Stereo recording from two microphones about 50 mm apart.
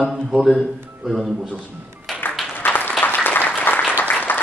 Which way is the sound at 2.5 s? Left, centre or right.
Left.